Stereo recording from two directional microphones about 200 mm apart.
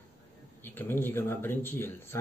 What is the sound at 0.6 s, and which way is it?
Speech, 10° left (ahead or behind).